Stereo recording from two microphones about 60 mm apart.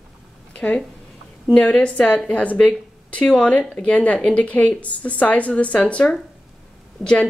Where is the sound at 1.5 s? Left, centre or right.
Centre.